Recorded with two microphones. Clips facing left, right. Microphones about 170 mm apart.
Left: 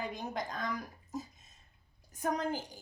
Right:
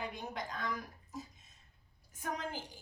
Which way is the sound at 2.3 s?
40° left (ahead or behind).